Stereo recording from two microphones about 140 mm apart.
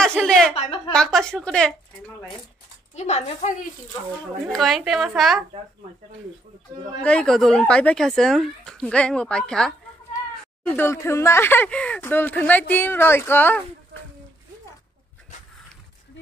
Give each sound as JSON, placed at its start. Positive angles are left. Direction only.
{"t": 0.0, "sound": "a woman's voice", "side_deg": 5}
{"t": 0.6, "sound": "a woman's voice", "side_deg": 40}
{"t": 0.9, "sound": "speech", "side_deg": 5}
{"t": 3.0, "sound": "a woman's voice", "side_deg": 55}
{"t": 4.5, "sound": "speech", "side_deg": 0}
{"t": 7.0, "sound": "speech", "side_deg": 5}
{"t": 10.7, "sound": "speech", "side_deg": 15}